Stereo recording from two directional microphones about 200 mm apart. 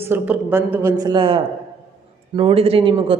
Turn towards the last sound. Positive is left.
turn(degrees=-25)  # may be behind; listen again after turning